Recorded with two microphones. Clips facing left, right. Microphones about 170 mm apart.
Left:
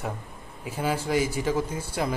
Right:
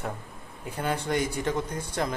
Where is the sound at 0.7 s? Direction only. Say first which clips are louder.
Left 2 dB; 5° left (ahead or behind).